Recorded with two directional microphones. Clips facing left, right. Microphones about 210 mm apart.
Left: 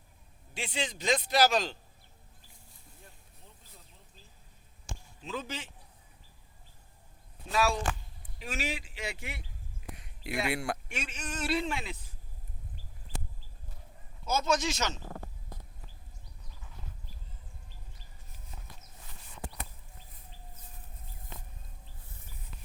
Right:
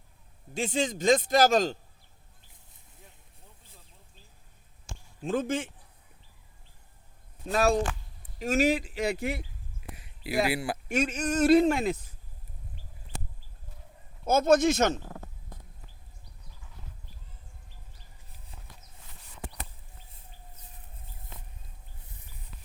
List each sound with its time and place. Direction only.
0.5 s speech: 45° right (ahead or behind)
5.2 s speech: 50° right (ahead or behind)
7.5 s speech: 45° right (ahead or behind)
9.9 s a sound: 5° right (ahead or behind)
10.5 s speech: 5° right (ahead or behind)
10.8 s speech: 45° right (ahead or behind)
14.3 s speech: 55° right (ahead or behind)